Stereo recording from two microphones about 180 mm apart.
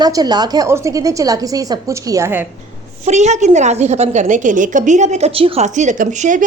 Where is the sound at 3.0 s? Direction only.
40° right (ahead or behind).